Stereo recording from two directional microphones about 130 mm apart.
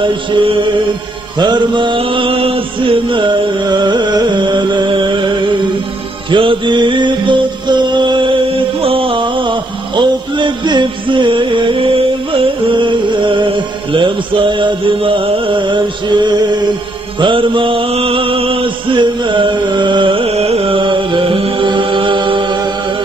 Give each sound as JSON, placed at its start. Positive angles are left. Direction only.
{"t": 1.4, "sound": "music", "side_deg": -35}
{"t": 6.3, "sound": "music", "side_deg": -40}
{"t": 8.8, "sound": "a sound", "side_deg": -45}
{"t": 13.9, "sound": "music", "side_deg": -40}
{"t": 17.2, "sound": "chant", "side_deg": -40}